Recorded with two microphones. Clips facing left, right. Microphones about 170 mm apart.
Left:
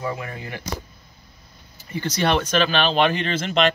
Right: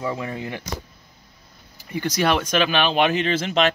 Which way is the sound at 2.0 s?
10° right (ahead or behind).